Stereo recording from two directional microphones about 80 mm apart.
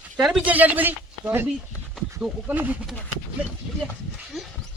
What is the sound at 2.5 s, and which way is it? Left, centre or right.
Speech, right.